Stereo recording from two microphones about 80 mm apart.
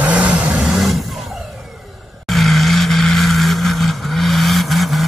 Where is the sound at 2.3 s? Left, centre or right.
Centre.